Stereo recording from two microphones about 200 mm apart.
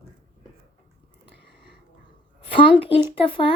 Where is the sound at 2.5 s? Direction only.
25° left (ahead or behind).